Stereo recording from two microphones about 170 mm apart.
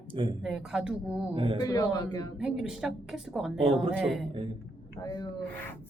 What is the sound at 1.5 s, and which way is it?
Speech, 20° left (ahead or behind).